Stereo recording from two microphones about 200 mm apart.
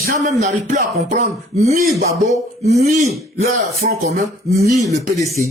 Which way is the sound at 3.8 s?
45° right (ahead or behind).